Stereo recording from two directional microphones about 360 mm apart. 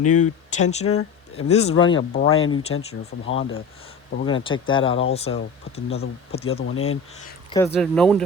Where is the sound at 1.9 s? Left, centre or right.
Left.